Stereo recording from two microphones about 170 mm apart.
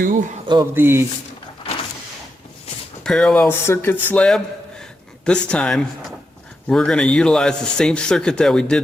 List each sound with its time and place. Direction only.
0.0 s speech: 50° right (ahead or behind)
0.6 s speech: 15° right (ahead or behind)
3.0 s speech: 5° left (ahead or behind)